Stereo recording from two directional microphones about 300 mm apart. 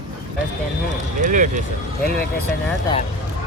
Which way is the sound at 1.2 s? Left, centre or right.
Right.